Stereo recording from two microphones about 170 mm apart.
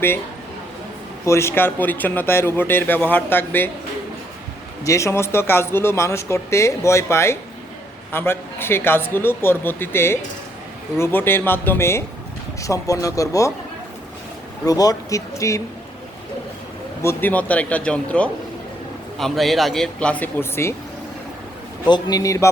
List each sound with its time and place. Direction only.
1.2 s speech: 15° left (ahead or behind)
4.9 s speech: 15° left (ahead or behind)
14.6 s speech: 20° left (ahead or behind)
17.0 s speech: 15° left (ahead or behind)
21.8 s speech: 25° left (ahead or behind)